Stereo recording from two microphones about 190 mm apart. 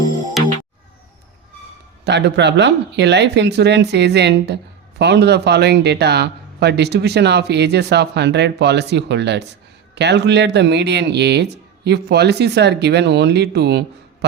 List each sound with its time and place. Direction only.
2.0 s speech: 65° right (ahead or behind)